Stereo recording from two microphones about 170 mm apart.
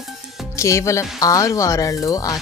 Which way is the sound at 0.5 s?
15° left (ahead or behind).